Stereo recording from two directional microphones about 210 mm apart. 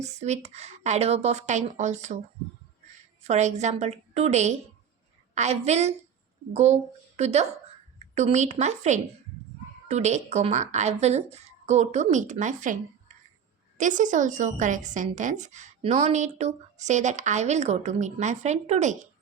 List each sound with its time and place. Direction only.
0.0 s a woman's voice: 35° right (ahead or behind)
3.2 s a woman's voice: 35° right (ahead or behind)